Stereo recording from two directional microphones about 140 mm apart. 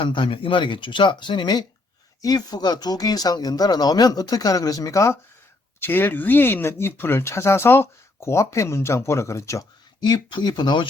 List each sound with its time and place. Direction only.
0.0 s speech: 35° left (ahead or behind); by 9.6 s 20° left (ahead or behind)
10.0 s speech: 35° left (ahead or behind)